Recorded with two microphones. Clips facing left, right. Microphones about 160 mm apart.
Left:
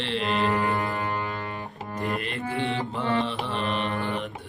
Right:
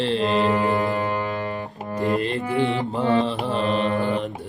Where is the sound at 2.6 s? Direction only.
30° right (ahead or behind).